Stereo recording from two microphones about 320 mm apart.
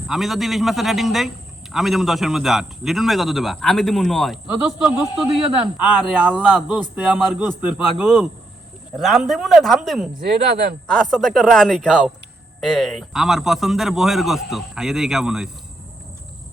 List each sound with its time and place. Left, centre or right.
0.1 s speech: centre
10.5 s speech: right
10.8 s speech: centre